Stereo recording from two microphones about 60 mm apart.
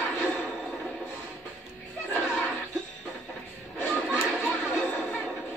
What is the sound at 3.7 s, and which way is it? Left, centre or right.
Music, left.